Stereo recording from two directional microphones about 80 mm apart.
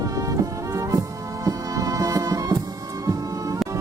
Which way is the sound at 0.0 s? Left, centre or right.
Right.